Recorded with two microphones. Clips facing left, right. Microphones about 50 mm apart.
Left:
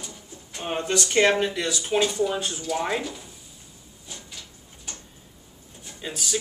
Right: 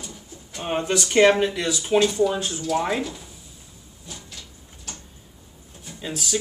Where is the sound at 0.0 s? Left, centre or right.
Centre.